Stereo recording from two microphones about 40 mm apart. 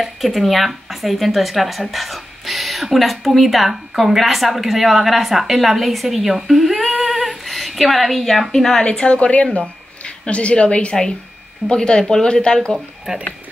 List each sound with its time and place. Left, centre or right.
0.0 s speech: centre
7.0 s a sound: centre
8.5 s speech: centre
9.0 s a woman's voice: left
12.7 s speech: centre